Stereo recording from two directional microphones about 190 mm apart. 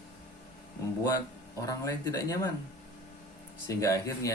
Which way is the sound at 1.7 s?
15° left (ahead or behind).